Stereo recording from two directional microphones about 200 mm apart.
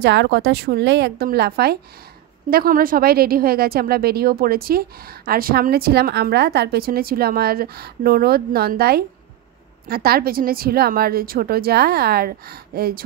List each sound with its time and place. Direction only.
0.0 s speech: 60° right (ahead or behind)